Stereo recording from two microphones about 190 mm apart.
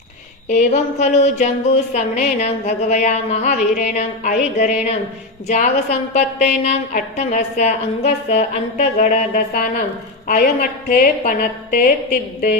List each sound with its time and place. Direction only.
0.4 s a woman's voice: 40° left (ahead or behind)